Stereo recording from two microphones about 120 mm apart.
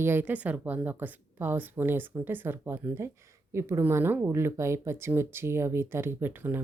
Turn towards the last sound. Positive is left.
turn(degrees=-15)  # may be behind; listen again after turning